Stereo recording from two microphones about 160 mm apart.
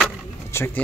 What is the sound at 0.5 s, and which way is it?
Speech, 15° left (ahead or behind).